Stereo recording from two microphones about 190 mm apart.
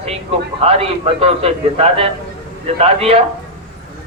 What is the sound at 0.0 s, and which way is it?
A man's voice, 30° right (ahead or behind).